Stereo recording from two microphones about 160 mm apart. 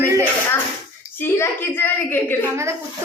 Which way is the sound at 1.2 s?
15° left (ahead or behind).